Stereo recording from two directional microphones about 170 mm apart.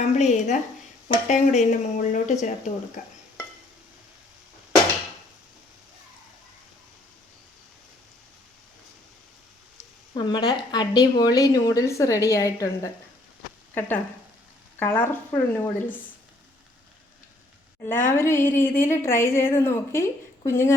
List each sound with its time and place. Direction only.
0.0 s speech: 40° left (ahead or behind)
10.2 s a woman's voice: 25° left (ahead or behind)
18.2 s a woman's voice: 15° left (ahead or behind)